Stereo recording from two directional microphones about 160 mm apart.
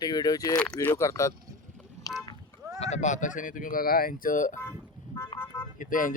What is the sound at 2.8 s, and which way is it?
Speech, 45° left (ahead or behind).